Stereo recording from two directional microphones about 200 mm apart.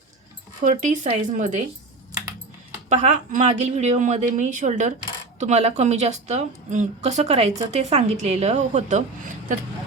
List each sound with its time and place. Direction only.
0.6 s a woman's voice: 40° right (ahead or behind)
2.9 s a woman's voice: 35° right (ahead or behind)